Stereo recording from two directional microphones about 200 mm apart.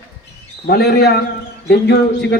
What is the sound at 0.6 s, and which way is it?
A man's voice, 55° left (ahead or behind).